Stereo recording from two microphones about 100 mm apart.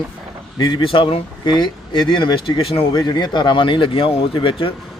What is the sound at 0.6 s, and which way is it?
Speech, 55° left (ahead or behind).